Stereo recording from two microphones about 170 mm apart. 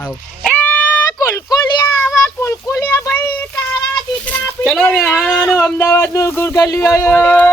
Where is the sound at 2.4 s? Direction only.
15° left (ahead or behind).